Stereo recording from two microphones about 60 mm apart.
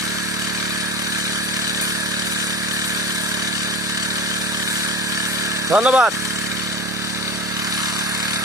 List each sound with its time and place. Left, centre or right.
5.7 s speech: right